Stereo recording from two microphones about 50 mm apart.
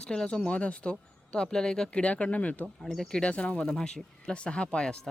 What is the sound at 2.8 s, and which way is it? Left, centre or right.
Speech, centre.